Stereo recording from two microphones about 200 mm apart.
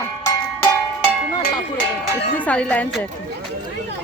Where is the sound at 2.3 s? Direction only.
5° left (ahead or behind).